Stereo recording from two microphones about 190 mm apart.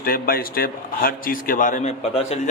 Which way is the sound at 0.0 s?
50° left (ahead or behind).